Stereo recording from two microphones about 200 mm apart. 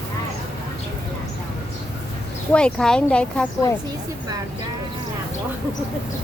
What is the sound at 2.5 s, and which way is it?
Speech, 5° left (ahead or behind).